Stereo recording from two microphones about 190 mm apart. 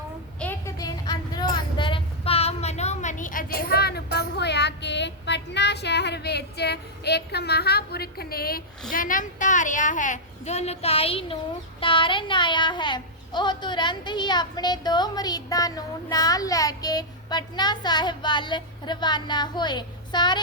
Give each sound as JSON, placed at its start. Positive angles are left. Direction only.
{"t": 0.3, "sound": "vehicle", "side_deg": 10}
{"t": 1.5, "sound": "a sound", "side_deg": 25}
{"t": 8.9, "sound": "a woman's voice", "side_deg": 45}